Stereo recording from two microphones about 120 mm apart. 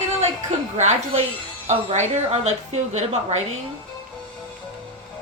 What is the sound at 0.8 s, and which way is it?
Speech, 75° right (ahead or behind).